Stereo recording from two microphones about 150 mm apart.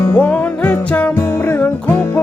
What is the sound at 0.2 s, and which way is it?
Music, 10° left (ahead or behind).